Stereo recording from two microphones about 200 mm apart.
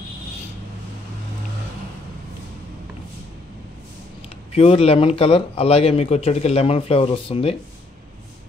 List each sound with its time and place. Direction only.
4.6 s speech: 30° left (ahead or behind)